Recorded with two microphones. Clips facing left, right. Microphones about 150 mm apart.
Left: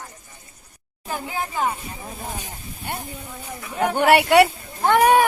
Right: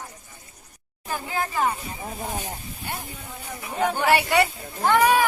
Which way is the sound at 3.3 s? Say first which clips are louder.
Left 2 dB; 15° left (ahead or behind).